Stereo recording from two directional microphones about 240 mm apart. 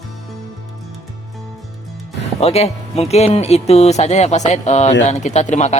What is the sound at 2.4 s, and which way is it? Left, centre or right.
Speech, left.